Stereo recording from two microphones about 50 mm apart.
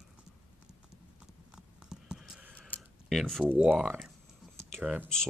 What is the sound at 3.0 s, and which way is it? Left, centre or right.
Speech, centre.